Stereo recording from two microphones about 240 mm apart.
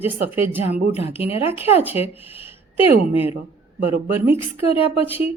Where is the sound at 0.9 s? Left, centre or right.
Left.